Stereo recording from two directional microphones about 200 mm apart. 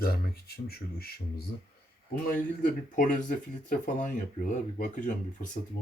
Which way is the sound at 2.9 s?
40° left (ahead or behind).